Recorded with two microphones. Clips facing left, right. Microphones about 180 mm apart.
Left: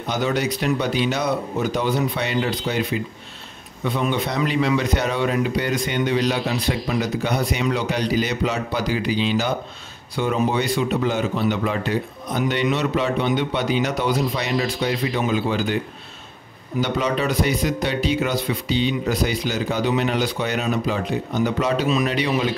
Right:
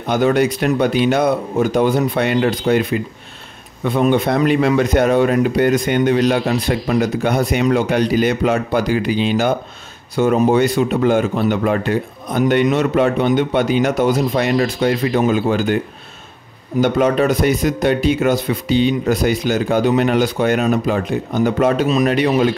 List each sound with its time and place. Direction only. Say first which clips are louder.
0.0 s a man's voice: right 7 dB; 55° right (ahead or behind)
16.8 s a man's voice: right 8 dB; 50° right (ahead or behind)